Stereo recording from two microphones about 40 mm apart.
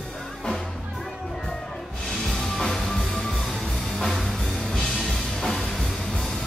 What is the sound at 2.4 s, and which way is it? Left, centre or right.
Music, centre.